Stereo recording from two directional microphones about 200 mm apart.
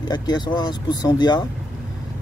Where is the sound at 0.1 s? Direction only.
20° left (ahead or behind).